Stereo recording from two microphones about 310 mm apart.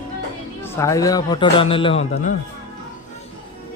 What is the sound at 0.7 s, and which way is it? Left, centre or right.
A man's voice, centre.